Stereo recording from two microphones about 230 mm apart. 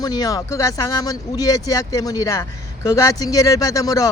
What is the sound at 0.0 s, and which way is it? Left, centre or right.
A man's voice, centre.